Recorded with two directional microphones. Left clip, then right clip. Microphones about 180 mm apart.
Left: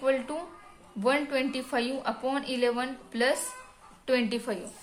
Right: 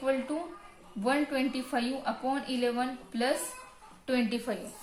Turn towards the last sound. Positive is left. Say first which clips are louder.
# left 3 dB
turn(degrees=45)  # may be behind; listen again after turning